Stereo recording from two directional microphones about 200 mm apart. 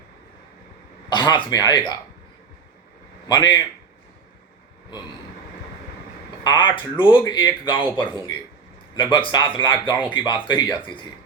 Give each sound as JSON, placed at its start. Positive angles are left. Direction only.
{"t": 1.1, "sound": "speech", "side_deg": 20}
{"t": 3.2, "sound": "speech", "side_deg": 20}
{"t": 6.4, "sound": "speech", "side_deg": 25}